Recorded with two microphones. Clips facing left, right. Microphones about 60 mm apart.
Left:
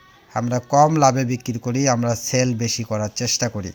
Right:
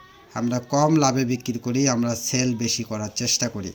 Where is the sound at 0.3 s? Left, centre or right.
Left.